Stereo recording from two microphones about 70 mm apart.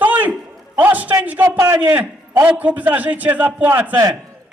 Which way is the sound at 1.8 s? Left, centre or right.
Right.